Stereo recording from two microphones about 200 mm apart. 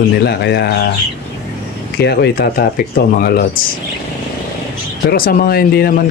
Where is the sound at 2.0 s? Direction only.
55° left (ahead or behind).